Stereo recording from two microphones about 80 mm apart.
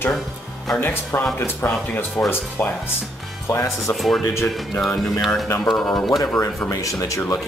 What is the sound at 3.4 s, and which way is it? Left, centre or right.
Speech, left.